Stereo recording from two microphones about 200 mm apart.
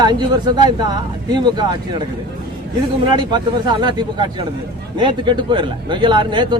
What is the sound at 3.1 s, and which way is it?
Speech, 20° right (ahead or behind).